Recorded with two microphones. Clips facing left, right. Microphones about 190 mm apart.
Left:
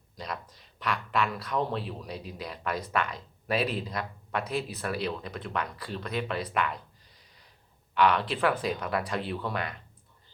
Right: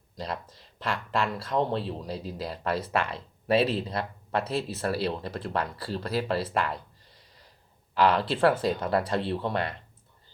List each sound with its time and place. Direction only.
0.2 s speech: 30° right (ahead or behind)
7.9 s speech: 30° right (ahead or behind)